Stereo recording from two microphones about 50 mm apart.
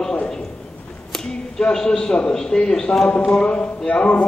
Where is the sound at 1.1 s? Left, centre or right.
Centre.